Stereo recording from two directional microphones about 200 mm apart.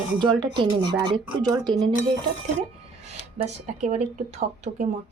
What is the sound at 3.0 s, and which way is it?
Speech, 35° right (ahead or behind).